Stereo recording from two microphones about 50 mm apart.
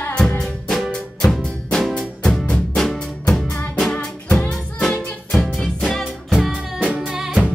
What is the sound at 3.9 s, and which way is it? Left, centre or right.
Music, left.